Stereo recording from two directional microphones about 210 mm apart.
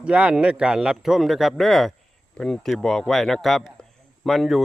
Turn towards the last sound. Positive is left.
turn(degrees=0)  # may be behind; listen again after turning